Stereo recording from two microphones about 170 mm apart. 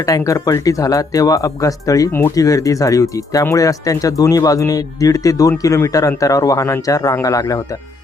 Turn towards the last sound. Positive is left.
turn(degrees=20)  # may be behind; listen again after turning